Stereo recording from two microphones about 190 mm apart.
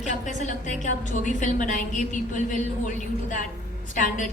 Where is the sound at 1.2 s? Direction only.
40° left (ahead or behind).